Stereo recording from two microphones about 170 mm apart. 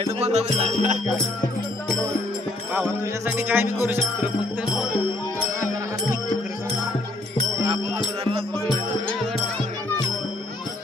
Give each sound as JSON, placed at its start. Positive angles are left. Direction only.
{"t": 0.0, "sound": "music", "side_deg": -40}
{"t": 2.7, "sound": "music", "side_deg": -10}
{"t": 8.2, "sound": "music", "side_deg": -35}